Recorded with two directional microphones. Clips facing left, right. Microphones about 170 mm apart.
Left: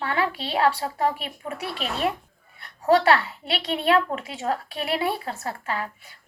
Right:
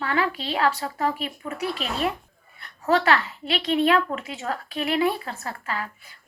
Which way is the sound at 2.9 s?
30° left (ahead or behind).